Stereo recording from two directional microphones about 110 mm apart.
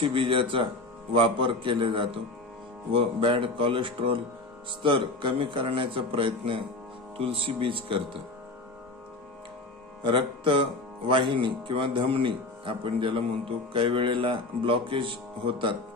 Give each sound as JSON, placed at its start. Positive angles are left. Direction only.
{"t": 0.0, "sound": "speech", "side_deg": -50}
{"t": 10.0, "sound": "speech", "side_deg": -50}